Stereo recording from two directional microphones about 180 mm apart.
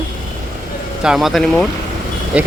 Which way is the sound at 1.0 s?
5° right (ahead or behind).